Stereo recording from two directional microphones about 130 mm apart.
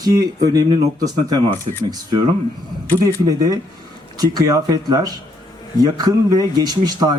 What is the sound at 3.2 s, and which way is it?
Speech, 30° right (ahead or behind).